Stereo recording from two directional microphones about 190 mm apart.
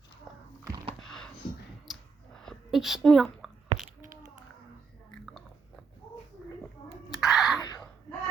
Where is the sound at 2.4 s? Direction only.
Centre (ahead or behind).